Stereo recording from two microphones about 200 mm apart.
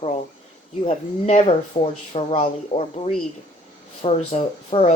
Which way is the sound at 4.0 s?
30° left (ahead or behind).